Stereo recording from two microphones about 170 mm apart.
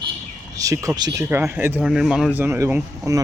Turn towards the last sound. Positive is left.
turn(degrees=-15)  # may be behind; listen again after turning